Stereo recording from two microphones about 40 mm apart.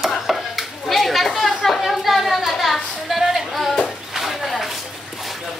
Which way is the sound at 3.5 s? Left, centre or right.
Centre.